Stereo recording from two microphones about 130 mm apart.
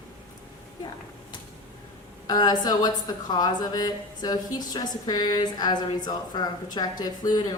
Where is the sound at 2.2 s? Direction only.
30° left (ahead or behind).